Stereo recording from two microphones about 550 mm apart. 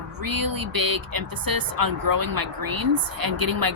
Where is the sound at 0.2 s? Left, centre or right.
Right.